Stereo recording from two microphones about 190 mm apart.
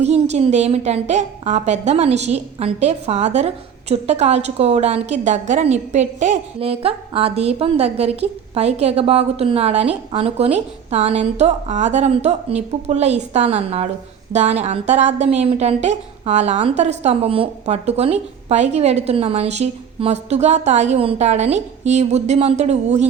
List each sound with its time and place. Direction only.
0.0 s a woman's voice: 35° right (ahead or behind)